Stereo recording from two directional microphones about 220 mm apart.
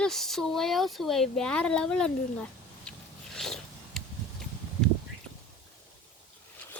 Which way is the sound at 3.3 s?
Centre (ahead or behind).